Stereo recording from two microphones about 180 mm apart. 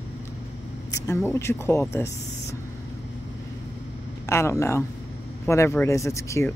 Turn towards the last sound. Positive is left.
turn(degrees=15)  # may be behind; listen again after turning